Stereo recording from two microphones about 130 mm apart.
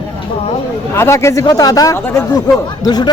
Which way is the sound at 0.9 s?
20° left (ahead or behind).